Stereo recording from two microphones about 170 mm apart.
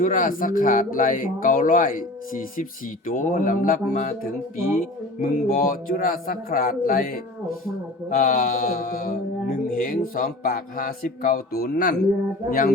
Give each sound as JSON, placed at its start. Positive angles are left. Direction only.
{"t": 0.0, "sound": "speech", "side_deg": 50}
{"t": 5.2, "sound": "mantra", "side_deg": 60}